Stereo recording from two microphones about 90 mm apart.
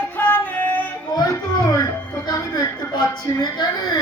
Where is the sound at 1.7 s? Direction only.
40° left (ahead or behind).